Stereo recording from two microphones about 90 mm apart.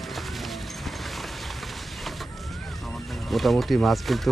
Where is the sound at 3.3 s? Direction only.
Centre (ahead or behind).